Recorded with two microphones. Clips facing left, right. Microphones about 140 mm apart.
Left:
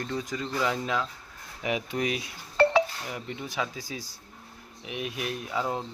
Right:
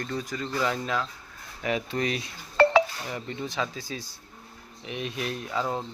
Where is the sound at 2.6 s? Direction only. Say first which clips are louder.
Right 2 dB; 90° right.